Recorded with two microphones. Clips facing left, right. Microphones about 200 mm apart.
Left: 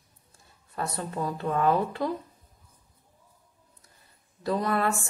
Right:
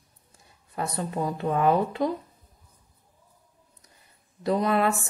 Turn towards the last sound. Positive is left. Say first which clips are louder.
# right 3 dB
turn(degrees=-20)  # may be behind; listen again after turning